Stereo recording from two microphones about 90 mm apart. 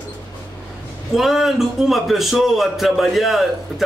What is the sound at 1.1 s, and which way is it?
A man's voice, 5° right (ahead or behind).